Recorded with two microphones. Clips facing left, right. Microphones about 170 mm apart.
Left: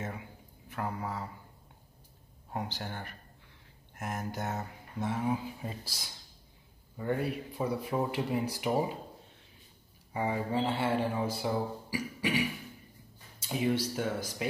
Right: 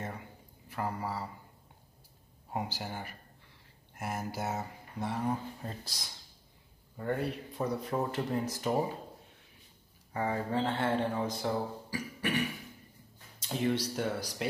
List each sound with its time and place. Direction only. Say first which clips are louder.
0.0 s speech: left 1 dB; centre (ahead or behind)
2.5 s speech: right 1 dB; 5° right (ahead or behind); by 8.9 s 10° left (ahead or behind)
10.1 s speech: left 1 dB; 15° left (ahead or behind)